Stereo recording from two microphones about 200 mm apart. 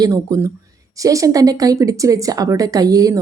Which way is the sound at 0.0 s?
15° right (ahead or behind).